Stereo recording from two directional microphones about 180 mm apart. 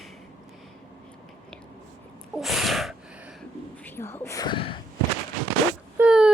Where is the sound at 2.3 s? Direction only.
Centre (ahead or behind).